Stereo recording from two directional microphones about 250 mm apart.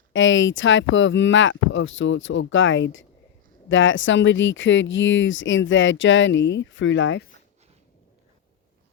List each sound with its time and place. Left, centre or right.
0.1 s speech: left